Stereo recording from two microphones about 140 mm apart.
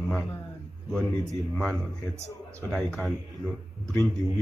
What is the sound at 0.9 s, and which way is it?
Speech, 20° right (ahead or behind).